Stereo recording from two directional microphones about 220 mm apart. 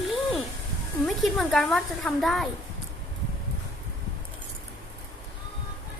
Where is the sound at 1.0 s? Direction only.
Centre (ahead or behind).